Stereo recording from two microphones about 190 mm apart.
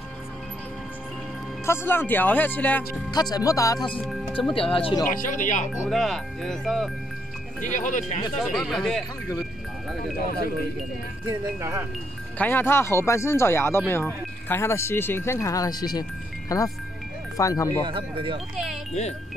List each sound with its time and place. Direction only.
1.7 s speech: 10° left (ahead or behind)
3.1 s speech: 20° left (ahead or behind)
4.0 s speech: centre (ahead or behind)
4.5 s speech: 30° left (ahead or behind)
5.1 s speech: 45° left (ahead or behind)
5.9 s speech: centre (ahead or behind)
7.6 s speech: 40° left (ahead or behind)
8.4 s speech: centre (ahead or behind)
11.2 s speech: 15° right (ahead or behind)
12.4 s speech: 10° left (ahead or behind)
17.8 s speech: 25° right (ahead or behind)